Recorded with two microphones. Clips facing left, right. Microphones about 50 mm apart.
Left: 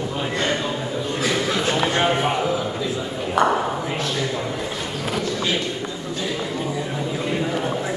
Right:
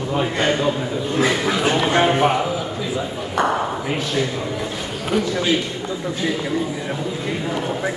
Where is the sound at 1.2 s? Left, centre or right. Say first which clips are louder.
Right 4 dB; right.